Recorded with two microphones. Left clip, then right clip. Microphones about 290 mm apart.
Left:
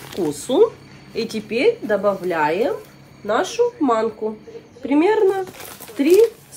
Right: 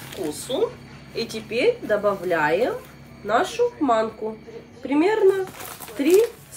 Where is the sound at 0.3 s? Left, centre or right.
Centre.